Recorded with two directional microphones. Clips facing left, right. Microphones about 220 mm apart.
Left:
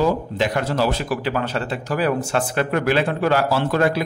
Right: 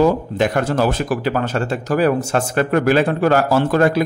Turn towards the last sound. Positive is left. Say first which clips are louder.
# right 4 dB
turn(degrees=-45)  # may be behind; listen again after turning